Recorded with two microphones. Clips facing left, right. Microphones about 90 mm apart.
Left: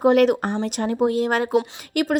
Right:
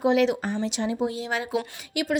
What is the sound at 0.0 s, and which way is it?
Speech, 50° left (ahead or behind).